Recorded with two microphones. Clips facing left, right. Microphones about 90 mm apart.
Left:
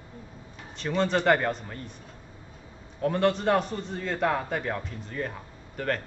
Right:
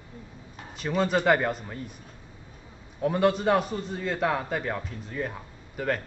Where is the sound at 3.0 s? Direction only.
5° right (ahead or behind).